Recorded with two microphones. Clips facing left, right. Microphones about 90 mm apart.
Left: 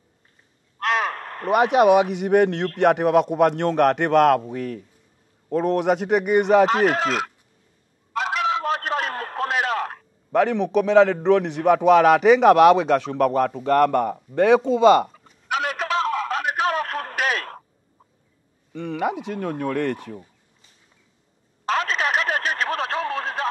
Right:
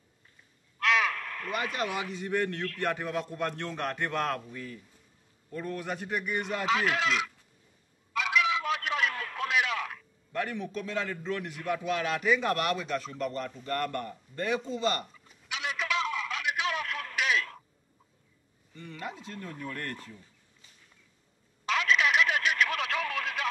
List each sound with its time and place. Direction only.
0.7 s caw: 40° left (ahead or behind)
1.5 s a man's voice: 70° left (ahead or behind)
6.7 s speech: 45° left (ahead or behind)
8.1 s a sound: 40° left (ahead or behind)
10.3 s a man's voice: 80° left
15.0 s telephone: 45° left (ahead or behind)
18.7 s a man's voice: 75° left (ahead or behind)
21.6 s a sound: 40° left (ahead or behind)